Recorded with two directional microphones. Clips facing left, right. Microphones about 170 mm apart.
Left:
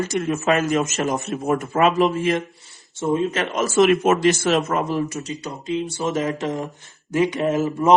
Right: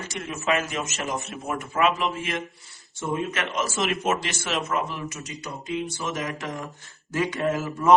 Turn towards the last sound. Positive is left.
turn(degrees=20)  # may be behind; listen again after turning